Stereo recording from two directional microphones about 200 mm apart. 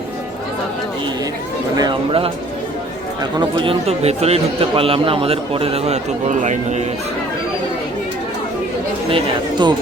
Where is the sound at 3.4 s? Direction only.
25° right (ahead or behind).